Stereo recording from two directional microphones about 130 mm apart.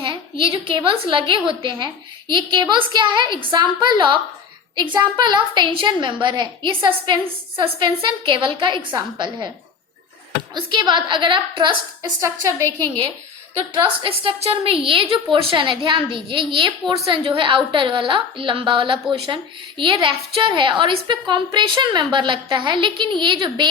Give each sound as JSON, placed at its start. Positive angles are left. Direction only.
{"t": 0.6, "sound": "a woman's voice", "side_deg": -40}
{"t": 10.5, "sound": "a woman's voice", "side_deg": -35}
{"t": 12.2, "sound": "a woman's voice", "side_deg": -25}
{"t": 13.7, "sound": "a woman's voice", "side_deg": -40}
{"t": 14.3, "sound": "a woman's voice", "side_deg": -50}